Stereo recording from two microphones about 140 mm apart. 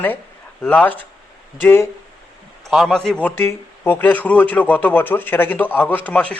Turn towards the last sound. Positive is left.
turn(degrees=10)  # may be behind; listen again after turning